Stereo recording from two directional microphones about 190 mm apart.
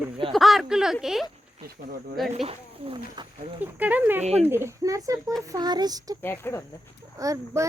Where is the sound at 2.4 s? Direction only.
30° right (ahead or behind).